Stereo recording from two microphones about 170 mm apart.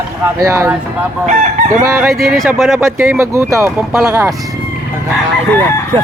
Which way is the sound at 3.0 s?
15° right (ahead or behind).